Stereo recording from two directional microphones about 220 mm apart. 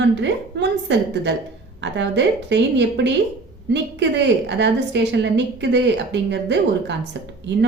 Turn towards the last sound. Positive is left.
turn(degrees=-55)  # may be behind; listen again after turning